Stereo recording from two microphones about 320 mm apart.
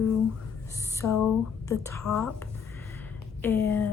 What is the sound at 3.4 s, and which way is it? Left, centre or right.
Speech, centre.